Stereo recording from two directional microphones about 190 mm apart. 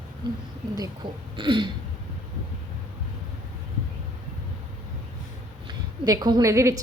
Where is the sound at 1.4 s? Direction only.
25° right (ahead or behind).